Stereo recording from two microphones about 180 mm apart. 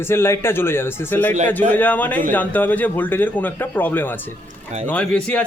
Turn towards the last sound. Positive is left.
turn(degrees=5)  # may be behind; listen again after turning